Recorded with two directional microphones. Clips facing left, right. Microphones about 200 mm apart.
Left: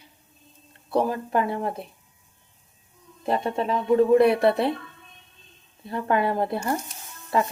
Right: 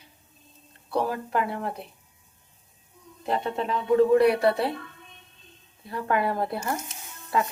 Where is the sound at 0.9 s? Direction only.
20° left (ahead or behind).